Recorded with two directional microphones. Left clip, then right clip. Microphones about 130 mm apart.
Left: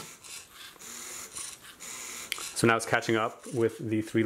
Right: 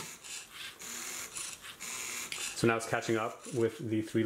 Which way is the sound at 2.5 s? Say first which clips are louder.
Left 6 dB; 40° left (ahead or behind).